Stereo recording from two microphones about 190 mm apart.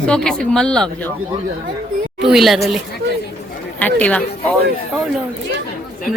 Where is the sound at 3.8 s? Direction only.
10° left (ahead or behind).